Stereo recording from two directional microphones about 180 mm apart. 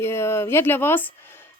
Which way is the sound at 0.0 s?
15° left (ahead or behind).